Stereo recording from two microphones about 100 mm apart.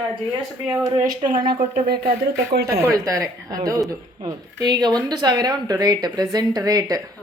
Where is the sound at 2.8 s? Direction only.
35° right (ahead or behind).